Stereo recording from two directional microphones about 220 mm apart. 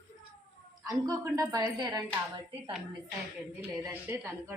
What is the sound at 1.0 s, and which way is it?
A woman's voice, 15° right (ahead or behind).